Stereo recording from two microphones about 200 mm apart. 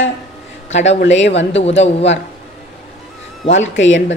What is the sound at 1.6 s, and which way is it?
Speech, 30° left (ahead or behind).